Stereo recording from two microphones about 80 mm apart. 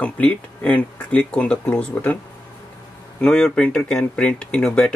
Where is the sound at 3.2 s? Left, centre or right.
Centre.